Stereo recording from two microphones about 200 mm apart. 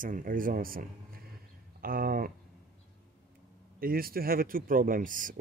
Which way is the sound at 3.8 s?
45° right (ahead or behind).